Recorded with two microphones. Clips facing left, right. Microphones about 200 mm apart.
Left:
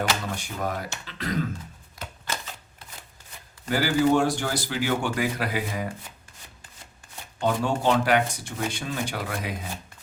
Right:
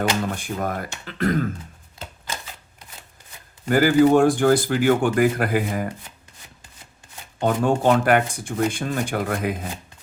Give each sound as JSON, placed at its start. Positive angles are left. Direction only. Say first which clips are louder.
{"t": 0.3, "sound": "speech", "louder": "right 4 dB", "side_deg": -50}
{"t": 3.7, "sound": "speech", "louder": "right 6 dB", "side_deg": -50}
{"t": 7.3, "sound": "speech", "louder": "right 5 dB", "side_deg": -50}